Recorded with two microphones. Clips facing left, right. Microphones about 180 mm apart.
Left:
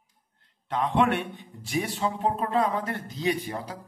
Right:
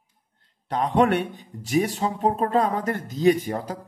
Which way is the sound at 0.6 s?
40° right (ahead or behind).